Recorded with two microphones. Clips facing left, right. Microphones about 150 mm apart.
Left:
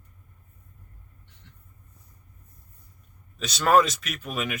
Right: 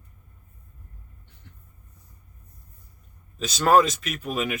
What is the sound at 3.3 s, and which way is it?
Speech, 35° right (ahead or behind).